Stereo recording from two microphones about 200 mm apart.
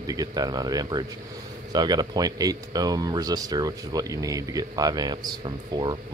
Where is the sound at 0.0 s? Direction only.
20° right (ahead or behind).